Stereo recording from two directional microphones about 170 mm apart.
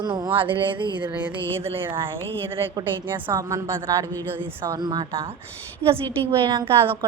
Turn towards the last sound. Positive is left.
turn(degrees=-30)  # may be behind; listen again after turning